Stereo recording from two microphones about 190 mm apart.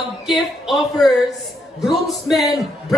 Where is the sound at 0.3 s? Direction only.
Centre (ahead or behind).